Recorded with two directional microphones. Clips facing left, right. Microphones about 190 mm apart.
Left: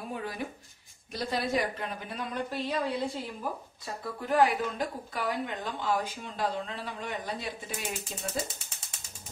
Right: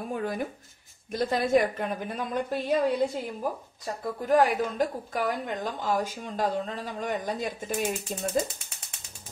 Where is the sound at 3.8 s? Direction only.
45° right (ahead or behind).